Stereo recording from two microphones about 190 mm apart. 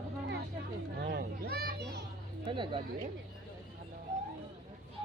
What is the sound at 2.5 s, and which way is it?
Speech, 25° right (ahead or behind).